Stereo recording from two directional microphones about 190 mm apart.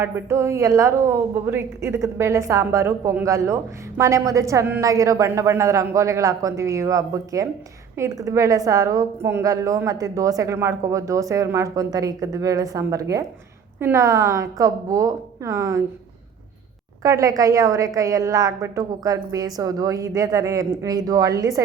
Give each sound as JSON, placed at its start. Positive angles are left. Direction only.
{"t": 0.0, "sound": "a woman's voice", "side_deg": -15}
{"t": 17.0, "sound": "a woman's voice", "side_deg": -15}